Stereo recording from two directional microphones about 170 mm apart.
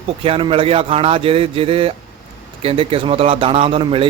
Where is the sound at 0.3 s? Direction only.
30° right (ahead or behind).